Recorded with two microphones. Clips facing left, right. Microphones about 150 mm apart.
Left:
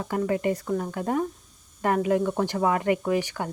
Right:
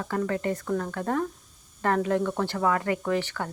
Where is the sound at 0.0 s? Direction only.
15° left (ahead or behind).